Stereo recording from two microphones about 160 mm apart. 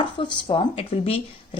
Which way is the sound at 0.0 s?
30° left (ahead or behind).